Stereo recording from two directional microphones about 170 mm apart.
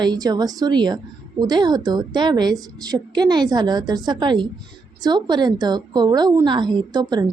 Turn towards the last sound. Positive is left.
turn(degrees=-25)  # may be behind; listen again after turning